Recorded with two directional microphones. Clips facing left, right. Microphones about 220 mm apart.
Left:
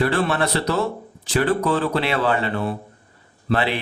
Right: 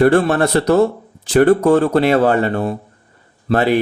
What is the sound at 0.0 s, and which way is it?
Speech, 45° right (ahead or behind).